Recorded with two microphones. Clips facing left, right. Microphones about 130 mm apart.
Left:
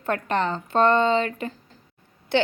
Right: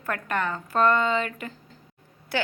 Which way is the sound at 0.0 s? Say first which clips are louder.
Left 4 dB; 25° left (ahead or behind).